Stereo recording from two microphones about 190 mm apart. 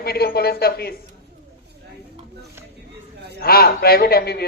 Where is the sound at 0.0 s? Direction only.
55° left (ahead or behind).